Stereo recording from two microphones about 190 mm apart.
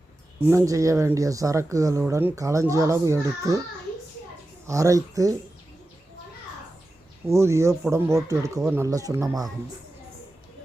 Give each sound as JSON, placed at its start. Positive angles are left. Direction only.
{"t": 0.4, "sound": "speech", "side_deg": -15}
{"t": 4.6, "sound": "speech", "side_deg": -15}
{"t": 7.3, "sound": "speech", "side_deg": -15}